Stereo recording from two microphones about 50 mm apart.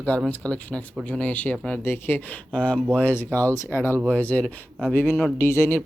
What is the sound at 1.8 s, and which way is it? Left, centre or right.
Speech, left.